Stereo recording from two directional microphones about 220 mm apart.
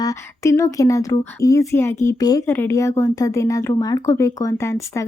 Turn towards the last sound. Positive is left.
turn(degrees=15)  # may be behind; listen again after turning